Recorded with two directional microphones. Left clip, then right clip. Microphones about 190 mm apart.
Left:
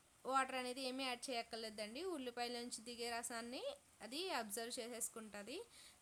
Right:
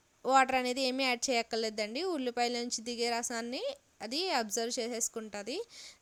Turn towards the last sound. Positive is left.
turn(degrees=-35)  # may be behind; listen again after turning